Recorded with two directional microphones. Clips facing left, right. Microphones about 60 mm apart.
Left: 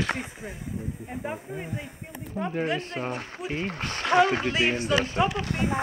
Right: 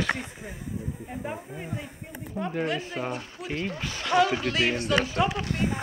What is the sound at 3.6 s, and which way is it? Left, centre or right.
Speech, left.